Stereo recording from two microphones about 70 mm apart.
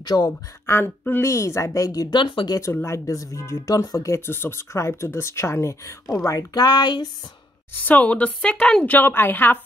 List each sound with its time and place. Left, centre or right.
0.0 s speech: left
0.7 s speech: left
1.2 s a woman's voice: left
2.7 s speech: left
3.7 s a woman's voice: left
4.1 s speech: left
6.2 s speech: left
7.7 s speech: left
8.8 s speech: left